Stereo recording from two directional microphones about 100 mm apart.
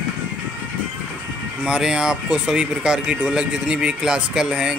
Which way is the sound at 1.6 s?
10° right (ahead or behind).